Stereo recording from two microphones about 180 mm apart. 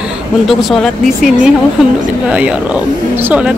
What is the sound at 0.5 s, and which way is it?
Speech, centre (ahead or behind).